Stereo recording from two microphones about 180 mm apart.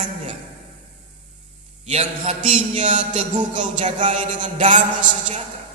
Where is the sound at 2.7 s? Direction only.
45° right (ahead or behind).